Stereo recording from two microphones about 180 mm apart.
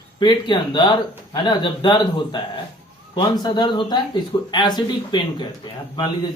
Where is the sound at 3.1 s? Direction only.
25° left (ahead or behind).